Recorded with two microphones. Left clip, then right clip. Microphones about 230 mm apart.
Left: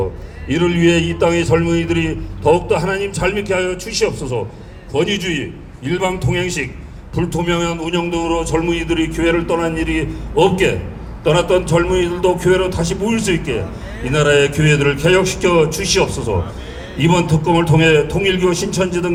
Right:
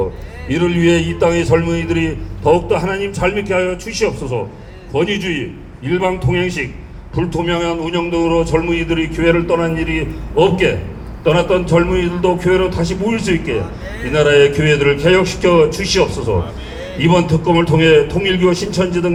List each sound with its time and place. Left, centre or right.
0.4 s a man's voice: left